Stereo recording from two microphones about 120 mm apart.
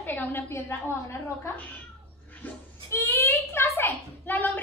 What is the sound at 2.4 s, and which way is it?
A child's voice, 20° left (ahead or behind).